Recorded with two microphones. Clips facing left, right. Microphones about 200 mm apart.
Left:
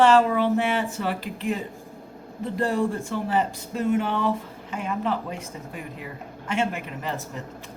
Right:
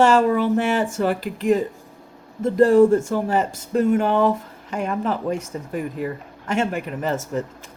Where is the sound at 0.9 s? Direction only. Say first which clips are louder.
Right 6 dB; 45° right (ahead or behind).